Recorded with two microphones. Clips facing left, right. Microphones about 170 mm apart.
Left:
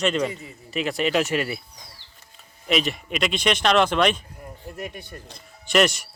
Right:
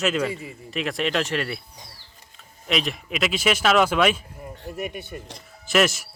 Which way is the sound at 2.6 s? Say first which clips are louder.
Left 2 dB; centre (ahead or behind).